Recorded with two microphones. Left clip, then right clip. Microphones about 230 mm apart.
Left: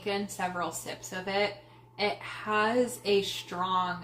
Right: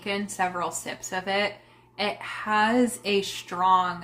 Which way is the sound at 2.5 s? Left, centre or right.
Right.